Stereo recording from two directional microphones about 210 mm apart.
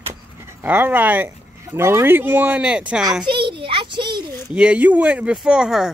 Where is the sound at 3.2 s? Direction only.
20° right (ahead or behind).